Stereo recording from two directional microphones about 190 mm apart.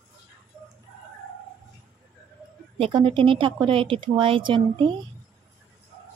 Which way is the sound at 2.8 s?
25° right (ahead or behind).